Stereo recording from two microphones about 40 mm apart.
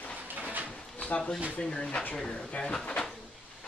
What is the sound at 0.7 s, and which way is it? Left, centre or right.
Drawer open or close, left.